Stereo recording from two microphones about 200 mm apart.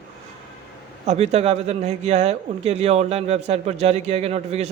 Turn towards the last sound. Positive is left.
turn(degrees=-30)  # may be behind; listen again after turning